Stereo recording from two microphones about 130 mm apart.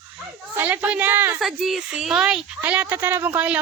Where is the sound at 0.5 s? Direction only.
15° right (ahead or behind).